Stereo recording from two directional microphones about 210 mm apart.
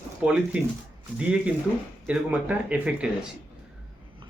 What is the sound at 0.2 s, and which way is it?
Speech, 5° right (ahead or behind).